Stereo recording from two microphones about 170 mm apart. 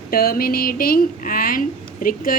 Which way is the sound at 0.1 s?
60° left (ahead or behind).